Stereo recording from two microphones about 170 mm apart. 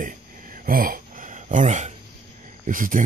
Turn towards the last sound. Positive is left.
turn(degrees=-50)  # may be behind; listen again after turning